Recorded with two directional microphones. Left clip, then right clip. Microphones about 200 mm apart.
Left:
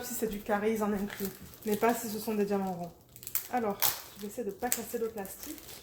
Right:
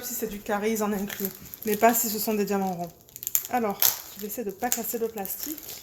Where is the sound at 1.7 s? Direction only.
55° right (ahead or behind).